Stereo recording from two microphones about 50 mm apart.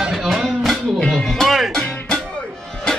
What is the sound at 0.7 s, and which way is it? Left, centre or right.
Music, centre.